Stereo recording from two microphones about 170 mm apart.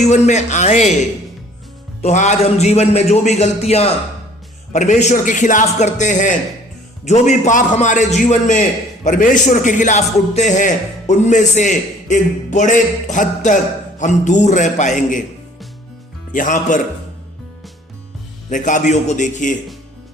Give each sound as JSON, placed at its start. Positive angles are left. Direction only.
{"t": 0.0, "sound": "a man's voice", "side_deg": 40}
{"t": 2.0, "sound": "a man's voice", "side_deg": 45}
{"t": 16.3, "sound": "a man's voice", "side_deg": 50}
{"t": 18.5, "sound": "a man's voice", "side_deg": 50}